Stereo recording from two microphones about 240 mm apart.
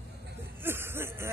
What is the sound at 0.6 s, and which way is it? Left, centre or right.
Music, centre.